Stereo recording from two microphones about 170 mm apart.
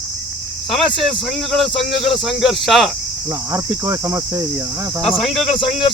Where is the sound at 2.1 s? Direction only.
Centre (ahead or behind).